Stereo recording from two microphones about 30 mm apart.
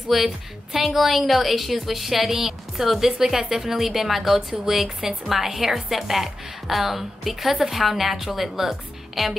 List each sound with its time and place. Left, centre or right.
0.1 s a woman's voice: centre
5.7 s a woman's voice: centre